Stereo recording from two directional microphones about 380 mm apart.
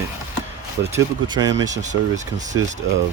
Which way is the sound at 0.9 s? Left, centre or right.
Centre.